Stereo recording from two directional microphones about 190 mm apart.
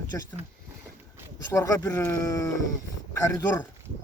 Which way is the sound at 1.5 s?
15° left (ahead or behind).